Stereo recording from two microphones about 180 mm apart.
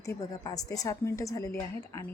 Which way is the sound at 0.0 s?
20° left (ahead or behind).